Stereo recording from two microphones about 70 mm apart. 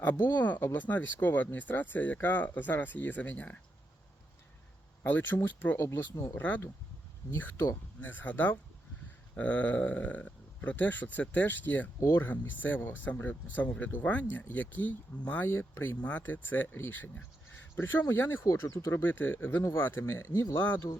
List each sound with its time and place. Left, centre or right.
0.0 s speech: left
5.0 s speech: left
5.7 s speech: left
7.3 s speech: left
11.9 s speech: left
12.2 s speech: left
18.1 s speech: left
18.4 s speech: left
19.0 s speech: left
20.2 s speech: left
20.7 s speech: left